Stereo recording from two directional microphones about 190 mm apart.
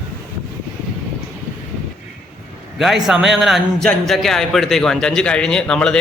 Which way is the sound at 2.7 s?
Centre (ahead or behind).